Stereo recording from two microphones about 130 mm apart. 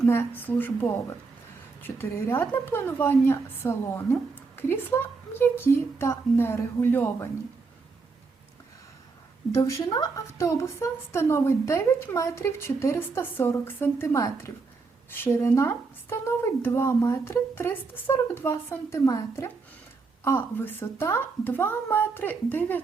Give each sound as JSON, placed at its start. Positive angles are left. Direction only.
{"t": 0.1, "sound": "a woman's voice", "side_deg": 15}
{"t": 9.5, "sound": "a woman's voice", "side_deg": 25}